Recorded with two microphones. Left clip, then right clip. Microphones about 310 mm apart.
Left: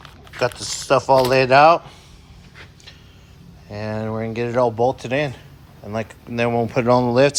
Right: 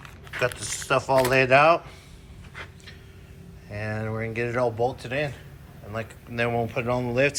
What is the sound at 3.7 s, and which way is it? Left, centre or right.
Speech, centre.